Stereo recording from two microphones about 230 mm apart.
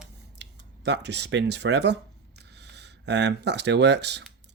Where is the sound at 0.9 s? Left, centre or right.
Right.